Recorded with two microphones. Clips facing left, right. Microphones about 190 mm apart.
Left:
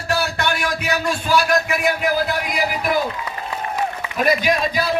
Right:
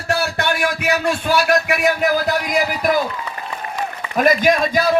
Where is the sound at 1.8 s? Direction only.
40° right (ahead or behind).